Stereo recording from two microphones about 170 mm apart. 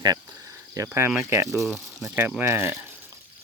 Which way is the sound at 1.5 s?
Centre (ahead or behind).